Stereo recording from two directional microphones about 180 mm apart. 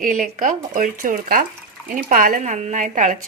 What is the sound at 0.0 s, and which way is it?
A woman's voice, 45° right (ahead or behind).